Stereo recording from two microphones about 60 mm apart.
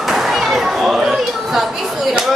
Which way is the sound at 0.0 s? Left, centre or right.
Centre.